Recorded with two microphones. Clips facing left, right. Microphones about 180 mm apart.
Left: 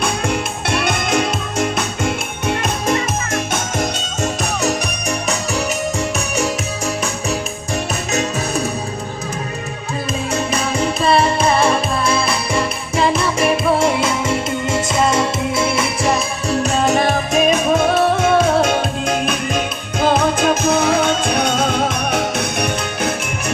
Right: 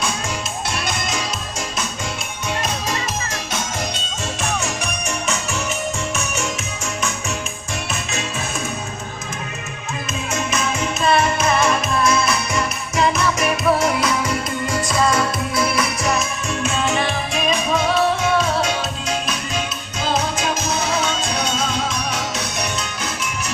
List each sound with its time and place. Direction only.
0.0 s music: 60° left (ahead or behind); by 6.5 s 35° left (ahead or behind)
8.1 s music: 40° left (ahead or behind)
10.3 s music: 35° left (ahead or behind); by 23.3 s 55° left (ahead or behind)